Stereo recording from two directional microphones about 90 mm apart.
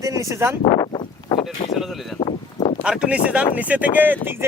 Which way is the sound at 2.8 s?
10° right (ahead or behind).